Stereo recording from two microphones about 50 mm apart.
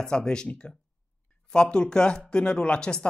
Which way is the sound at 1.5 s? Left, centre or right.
Centre.